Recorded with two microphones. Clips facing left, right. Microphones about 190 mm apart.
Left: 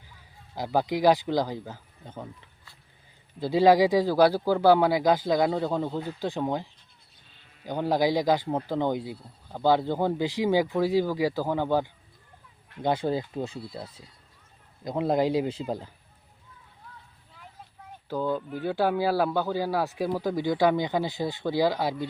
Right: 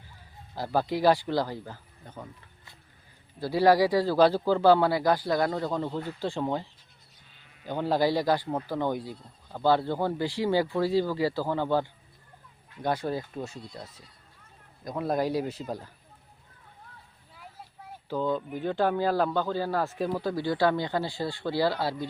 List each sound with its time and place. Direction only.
0.5 s speech: 15° left (ahead or behind)
3.4 s speech: 20° left (ahead or behind)
12.8 s speech: 25° left (ahead or behind)
13.6 s speech: 5° left (ahead or behind)
13.8 s speech: 30° left (ahead or behind)
17.3 s vehicle: 5° right (ahead or behind)
18.1 s speech: 10° left (ahead or behind)